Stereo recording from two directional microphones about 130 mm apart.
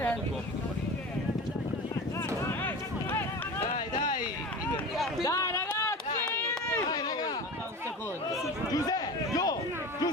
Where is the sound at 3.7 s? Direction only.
80° left.